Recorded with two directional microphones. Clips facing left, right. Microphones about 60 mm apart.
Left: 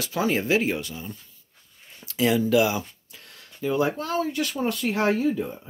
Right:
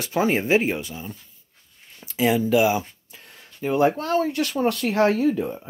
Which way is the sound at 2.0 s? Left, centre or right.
Centre.